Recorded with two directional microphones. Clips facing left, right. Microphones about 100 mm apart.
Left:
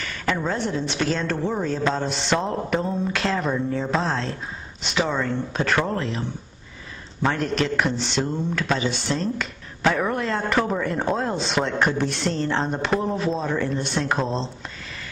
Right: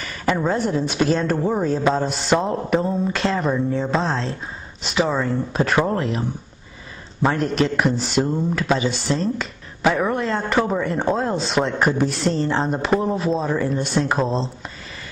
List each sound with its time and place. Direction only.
0.2 s a woman's voice: 10° right (ahead or behind)
5.8 s speech: 20° right (ahead or behind)
7.2 s speech: centre (ahead or behind)